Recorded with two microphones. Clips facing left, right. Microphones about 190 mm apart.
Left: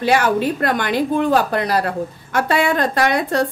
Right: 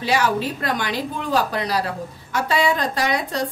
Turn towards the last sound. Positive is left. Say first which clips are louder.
# left 5 dB
turn(degrees=55)  # may be behind; listen again after turning